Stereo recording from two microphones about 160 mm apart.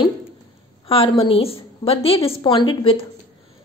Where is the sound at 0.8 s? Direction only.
35° left (ahead or behind).